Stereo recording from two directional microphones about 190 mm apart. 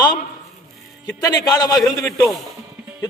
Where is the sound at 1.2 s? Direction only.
20° left (ahead or behind).